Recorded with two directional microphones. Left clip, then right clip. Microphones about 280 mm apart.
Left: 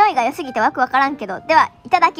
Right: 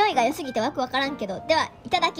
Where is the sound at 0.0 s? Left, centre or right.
Centre.